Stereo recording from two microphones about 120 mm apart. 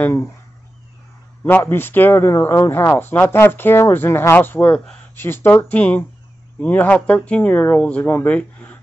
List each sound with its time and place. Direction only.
1.4 s speech: 20° left (ahead or behind)